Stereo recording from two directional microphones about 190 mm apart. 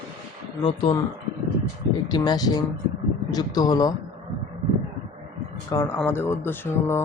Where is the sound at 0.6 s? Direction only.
25° left (ahead or behind).